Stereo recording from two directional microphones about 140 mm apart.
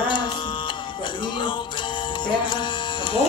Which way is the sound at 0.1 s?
35° left (ahead or behind).